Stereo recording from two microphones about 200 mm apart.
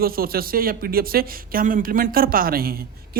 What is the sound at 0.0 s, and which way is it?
Speech, 50° right (ahead or behind).